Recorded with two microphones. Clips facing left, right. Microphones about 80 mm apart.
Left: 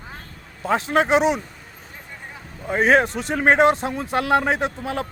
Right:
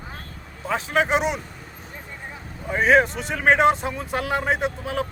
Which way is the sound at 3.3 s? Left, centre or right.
Left.